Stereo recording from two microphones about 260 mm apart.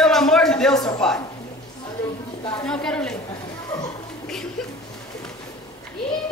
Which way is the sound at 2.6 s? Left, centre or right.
Centre.